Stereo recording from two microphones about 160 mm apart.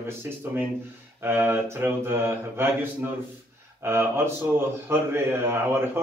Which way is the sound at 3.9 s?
15° right (ahead or behind).